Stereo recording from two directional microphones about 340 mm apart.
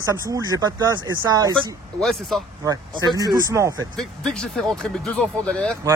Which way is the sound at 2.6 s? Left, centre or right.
Centre.